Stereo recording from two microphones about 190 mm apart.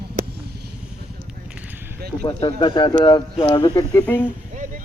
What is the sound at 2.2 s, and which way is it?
Speech, 30° left (ahead or behind).